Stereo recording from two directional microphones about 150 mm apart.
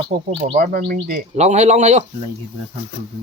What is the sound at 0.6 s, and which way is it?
Speech, 85° right.